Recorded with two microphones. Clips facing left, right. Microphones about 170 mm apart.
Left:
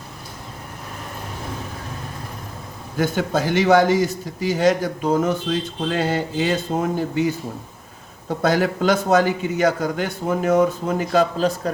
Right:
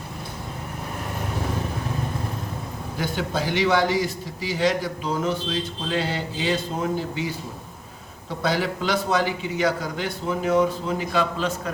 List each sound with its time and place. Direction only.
3.0 s a man's voice: 45° left (ahead or behind)